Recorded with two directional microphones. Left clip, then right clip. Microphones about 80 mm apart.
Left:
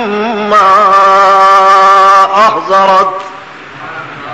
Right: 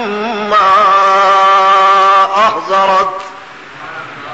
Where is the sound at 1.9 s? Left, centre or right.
Centre.